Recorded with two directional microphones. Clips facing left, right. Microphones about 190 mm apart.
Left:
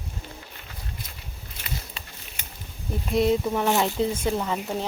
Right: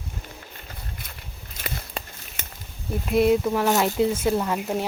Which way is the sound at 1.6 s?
50° right (ahead or behind).